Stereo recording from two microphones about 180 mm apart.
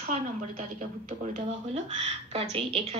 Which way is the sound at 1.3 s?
35° right (ahead or behind).